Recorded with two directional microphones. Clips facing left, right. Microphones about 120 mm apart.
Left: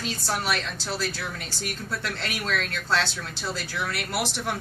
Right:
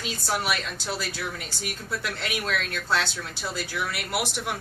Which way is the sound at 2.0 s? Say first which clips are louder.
Right 1 dB; 15° right (ahead or behind).